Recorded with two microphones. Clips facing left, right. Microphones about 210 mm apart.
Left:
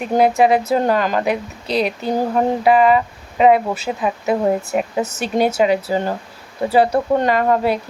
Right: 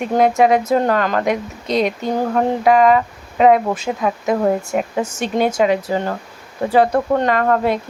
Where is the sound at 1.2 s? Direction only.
30° left (ahead or behind).